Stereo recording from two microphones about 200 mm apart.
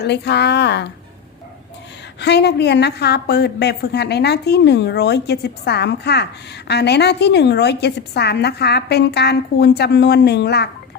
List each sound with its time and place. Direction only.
0.0 s a woman's voice: 55° left (ahead or behind)
2.2 s a woman's voice: 55° left (ahead or behind)